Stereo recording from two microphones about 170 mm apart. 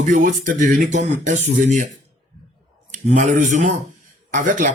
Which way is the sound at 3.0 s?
45° right (ahead or behind).